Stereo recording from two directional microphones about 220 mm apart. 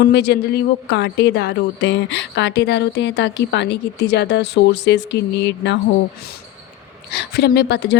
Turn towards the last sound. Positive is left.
turn(degrees=50)  # may be behind; listen again after turning